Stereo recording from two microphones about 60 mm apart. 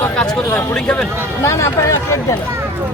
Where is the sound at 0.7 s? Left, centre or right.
Centre.